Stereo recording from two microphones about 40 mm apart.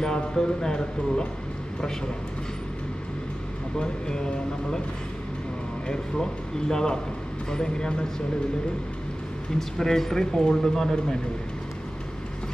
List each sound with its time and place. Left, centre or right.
0.0 s speech: centre
3.8 s speech: centre
6.7 s speech: centre
9.6 s speech: centre